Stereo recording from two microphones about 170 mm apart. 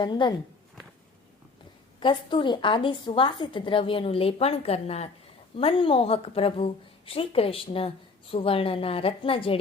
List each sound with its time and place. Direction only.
0.0 s speech: 25° left (ahead or behind)
2.0 s speech: 30° left (ahead or behind)